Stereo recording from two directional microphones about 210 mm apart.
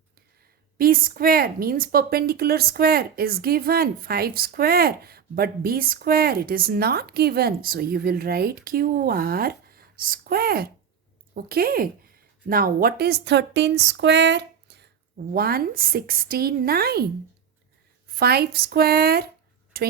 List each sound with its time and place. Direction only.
0.8 s a woman's voice: 45° right (ahead or behind)
18.1 s a woman's voice: 50° right (ahead or behind)